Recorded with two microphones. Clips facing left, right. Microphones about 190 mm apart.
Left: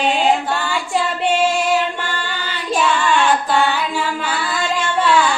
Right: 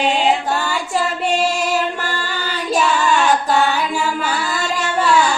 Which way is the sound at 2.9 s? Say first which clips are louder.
Left 1 dB; 40° right (ahead or behind).